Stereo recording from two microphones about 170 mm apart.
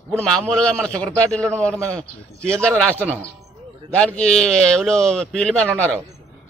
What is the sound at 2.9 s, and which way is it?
Speech, 10° right (ahead or behind).